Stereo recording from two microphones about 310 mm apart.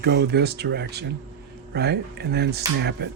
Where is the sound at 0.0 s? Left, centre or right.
Right.